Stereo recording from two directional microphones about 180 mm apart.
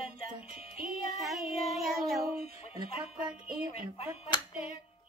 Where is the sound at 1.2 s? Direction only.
Centre (ahead or behind).